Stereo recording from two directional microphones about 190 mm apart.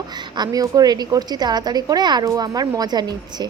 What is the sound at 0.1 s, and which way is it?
A woman's voice, 20° right (ahead or behind).